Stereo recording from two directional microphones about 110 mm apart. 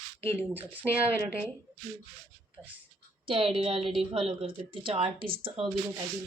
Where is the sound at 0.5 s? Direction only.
15° right (ahead or behind).